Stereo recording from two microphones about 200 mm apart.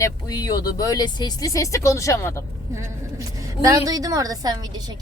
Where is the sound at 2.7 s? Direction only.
15° right (ahead or behind).